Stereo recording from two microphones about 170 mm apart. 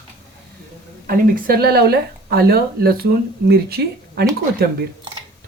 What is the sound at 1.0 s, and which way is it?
Speech, 55° right (ahead or behind).